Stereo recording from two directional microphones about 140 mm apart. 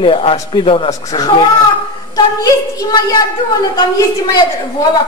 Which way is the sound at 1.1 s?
25° left (ahead or behind).